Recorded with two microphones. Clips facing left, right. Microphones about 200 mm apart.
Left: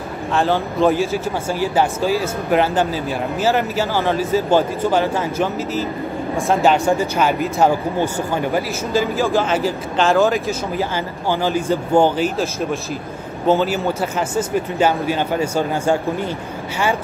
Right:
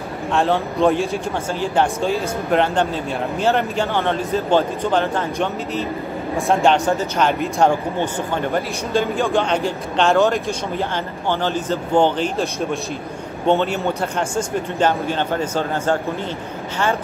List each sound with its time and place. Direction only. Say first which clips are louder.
0.3 s speech: even; centre (ahead or behind)